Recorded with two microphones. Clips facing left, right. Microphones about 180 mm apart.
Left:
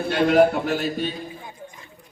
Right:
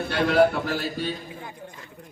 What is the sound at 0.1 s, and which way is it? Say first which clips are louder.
A man's voice: left 3 dB; 20° left (ahead or behind).